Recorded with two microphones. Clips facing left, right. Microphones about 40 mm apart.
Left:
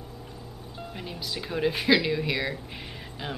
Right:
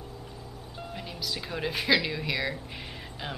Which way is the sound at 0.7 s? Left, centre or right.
Centre.